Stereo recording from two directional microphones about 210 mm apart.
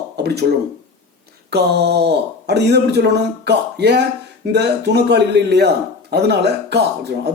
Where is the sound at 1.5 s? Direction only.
50° right (ahead or behind).